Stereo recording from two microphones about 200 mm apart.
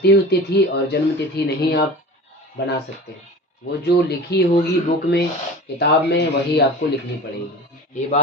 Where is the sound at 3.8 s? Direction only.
55° left (ahead or behind).